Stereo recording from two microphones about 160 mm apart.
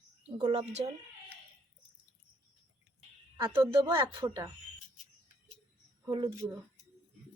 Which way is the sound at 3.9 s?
25° right (ahead or behind).